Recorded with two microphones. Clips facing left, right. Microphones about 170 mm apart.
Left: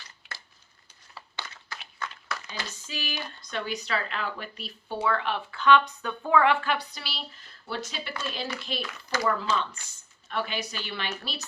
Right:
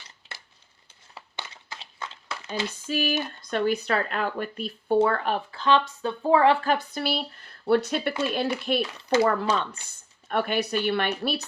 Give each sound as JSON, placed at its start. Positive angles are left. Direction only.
{"t": 1.1, "sound": "crumpling", "side_deg": -25}
{"t": 2.6, "sound": "speech", "side_deg": -55}
{"t": 9.1, "sound": "speech", "side_deg": -25}
{"t": 10.2, "sound": "speech", "side_deg": -55}